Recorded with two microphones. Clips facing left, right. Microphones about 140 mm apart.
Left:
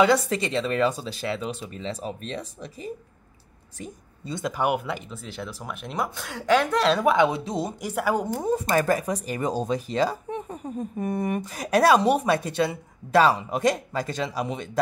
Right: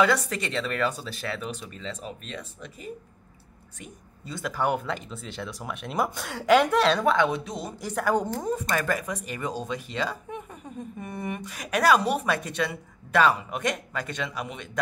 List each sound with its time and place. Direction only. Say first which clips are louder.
0.0 s speech: left 3 dB; 25° left (ahead or behind)
4.3 s speech: left 2 dB; 20° left (ahead or behind); by 7.1 s centre (ahead or behind)
7.1 s speech: left 3 dB; 20° left (ahead or behind)
7.8 s a woman's voice: right 2 dB; 10° left (ahead or behind)
8.5 s speech: left 5 dB; 30° left (ahead or behind)